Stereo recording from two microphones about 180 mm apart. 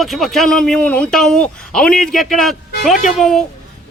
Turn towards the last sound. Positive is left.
turn(degrees=0)  # may be behind; listen again after turning